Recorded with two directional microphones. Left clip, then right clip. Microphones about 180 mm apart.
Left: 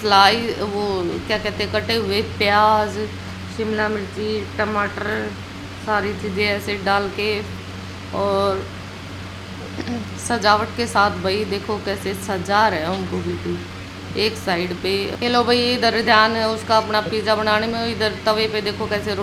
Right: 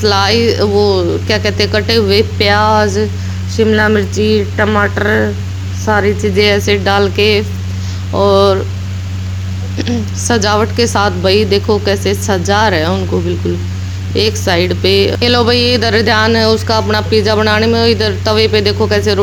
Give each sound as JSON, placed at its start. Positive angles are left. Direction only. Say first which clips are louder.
{"t": 0.0, "sound": "speech", "louder": "right 3 dB", "side_deg": -30}
{"t": 3.6, "sound": "speech", "louder": "right 11 dB", "side_deg": -40}
{"t": 9.7, "sound": "speech", "louder": "right 11 dB", "side_deg": -25}
{"t": 14.2, "sound": "speech", "louder": "right 8 dB", "side_deg": -30}